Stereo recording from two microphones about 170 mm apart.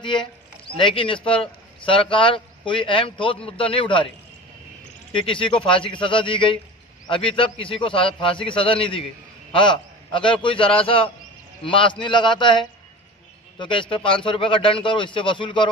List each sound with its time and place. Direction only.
0.0 s speech: 30° left (ahead or behind)
5.1 s a man's voice: 30° left (ahead or behind)